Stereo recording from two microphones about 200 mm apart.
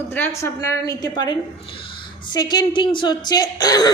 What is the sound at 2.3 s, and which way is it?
A woman's voice, 20° left (ahead or behind).